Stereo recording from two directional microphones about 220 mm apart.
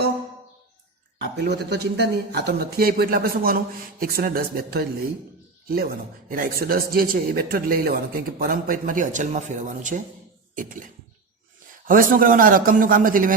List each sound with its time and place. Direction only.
1.4 s speech: 50° right (ahead or behind)
11.9 s speech: 40° right (ahead or behind)